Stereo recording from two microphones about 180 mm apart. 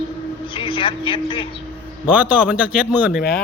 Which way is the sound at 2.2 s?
5° right (ahead or behind).